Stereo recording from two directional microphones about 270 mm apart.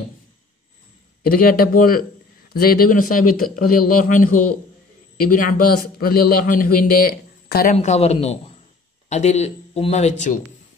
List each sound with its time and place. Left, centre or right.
1.2 s a man's voice: left